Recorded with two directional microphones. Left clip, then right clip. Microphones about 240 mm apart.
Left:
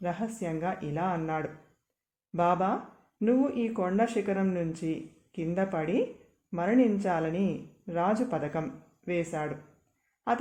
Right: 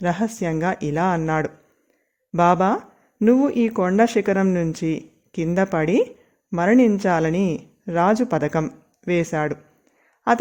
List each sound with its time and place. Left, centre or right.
0.0 s speech: right